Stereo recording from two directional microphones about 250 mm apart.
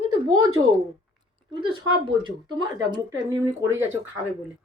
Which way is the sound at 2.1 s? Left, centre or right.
Centre.